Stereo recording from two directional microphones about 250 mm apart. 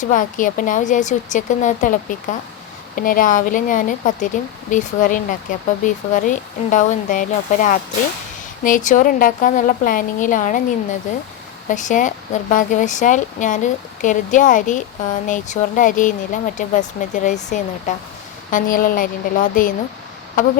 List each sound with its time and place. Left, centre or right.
0.0 s speech: left